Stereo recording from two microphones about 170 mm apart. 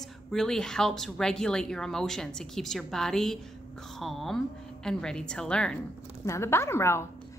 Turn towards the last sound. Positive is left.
turn(degrees=15)  # may be behind; listen again after turning